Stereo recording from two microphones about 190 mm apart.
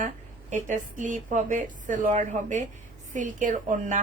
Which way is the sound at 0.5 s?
40° right (ahead or behind).